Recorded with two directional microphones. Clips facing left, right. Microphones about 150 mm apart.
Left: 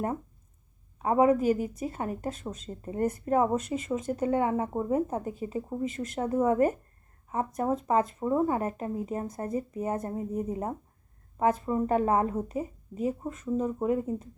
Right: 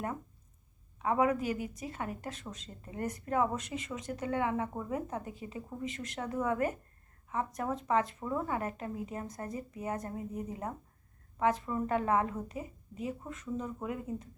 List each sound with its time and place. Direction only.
0.9 s a woman's voice: 35° left (ahead or behind)
6.2 s a woman's voice: 35° left (ahead or behind)